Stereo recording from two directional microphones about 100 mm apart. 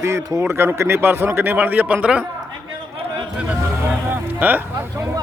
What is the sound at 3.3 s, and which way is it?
Music, 15° right (ahead or behind).